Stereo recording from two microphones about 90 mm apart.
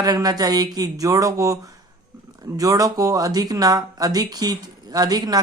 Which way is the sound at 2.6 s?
40° right (ahead or behind).